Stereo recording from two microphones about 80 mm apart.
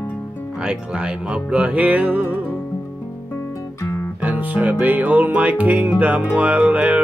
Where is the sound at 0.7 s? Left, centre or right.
Centre.